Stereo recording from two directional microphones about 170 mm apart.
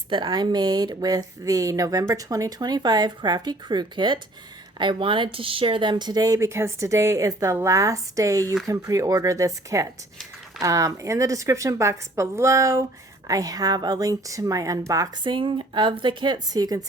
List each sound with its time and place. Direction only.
0.1 s speech: 25° right (ahead or behind)